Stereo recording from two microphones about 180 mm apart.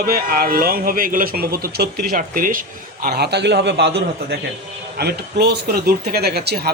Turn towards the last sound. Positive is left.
turn(degrees=-60)  # may be behind; listen again after turning